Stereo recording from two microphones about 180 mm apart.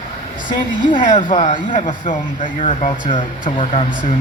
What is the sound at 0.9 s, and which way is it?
A man's voice, 30° left (ahead or behind).